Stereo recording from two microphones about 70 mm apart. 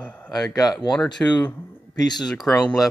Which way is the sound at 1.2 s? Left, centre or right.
Left.